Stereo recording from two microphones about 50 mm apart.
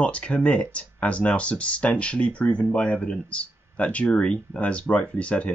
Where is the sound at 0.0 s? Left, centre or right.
Left.